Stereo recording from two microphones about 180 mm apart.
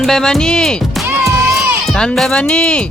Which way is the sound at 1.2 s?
Centre (ahead or behind).